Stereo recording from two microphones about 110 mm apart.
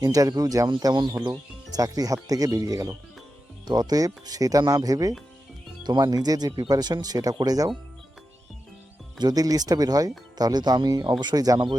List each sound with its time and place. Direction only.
0.0 s speech: 35° right (ahead or behind)
9.1 s speech: 40° right (ahead or behind)